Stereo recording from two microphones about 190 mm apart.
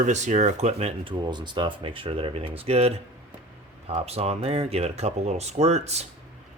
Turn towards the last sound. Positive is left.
turn(degrees=-35)  # may be behind; listen again after turning